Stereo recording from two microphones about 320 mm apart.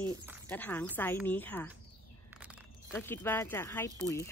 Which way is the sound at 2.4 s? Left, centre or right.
Centre.